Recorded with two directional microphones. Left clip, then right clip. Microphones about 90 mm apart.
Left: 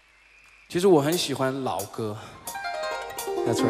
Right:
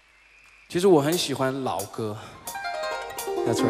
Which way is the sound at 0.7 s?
10° right (ahead or behind).